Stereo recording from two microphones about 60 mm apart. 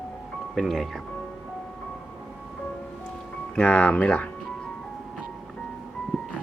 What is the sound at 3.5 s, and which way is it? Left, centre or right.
Speech, left.